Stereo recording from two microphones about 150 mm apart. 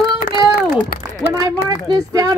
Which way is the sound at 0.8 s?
75° left (ahead or behind).